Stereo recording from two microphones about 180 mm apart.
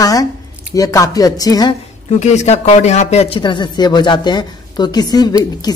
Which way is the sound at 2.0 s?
40° left (ahead or behind).